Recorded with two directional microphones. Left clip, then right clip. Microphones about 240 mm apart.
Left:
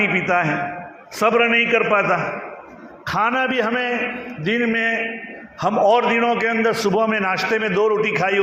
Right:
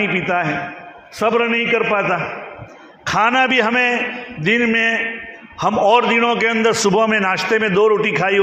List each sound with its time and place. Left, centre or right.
0.0 s a man's voice: right